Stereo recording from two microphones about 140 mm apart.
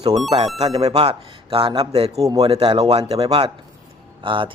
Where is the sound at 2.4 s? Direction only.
45° right (ahead or behind).